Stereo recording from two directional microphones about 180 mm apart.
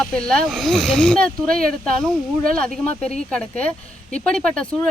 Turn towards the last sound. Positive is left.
turn(degrees=5)  # may be behind; listen again after turning